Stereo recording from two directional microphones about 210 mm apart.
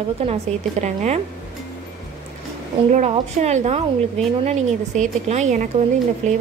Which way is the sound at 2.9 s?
35° right (ahead or behind).